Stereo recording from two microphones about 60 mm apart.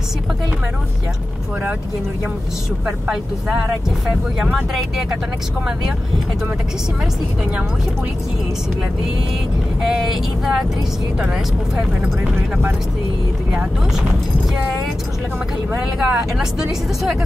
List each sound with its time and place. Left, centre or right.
3.1 s speech: centre
9.8 s speech: centre
16.0 s speech: centre